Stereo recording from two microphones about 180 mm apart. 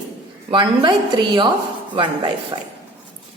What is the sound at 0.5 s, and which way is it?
Speech, 25° right (ahead or behind).